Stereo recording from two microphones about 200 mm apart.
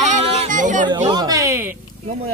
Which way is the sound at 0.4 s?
40° right (ahead or behind).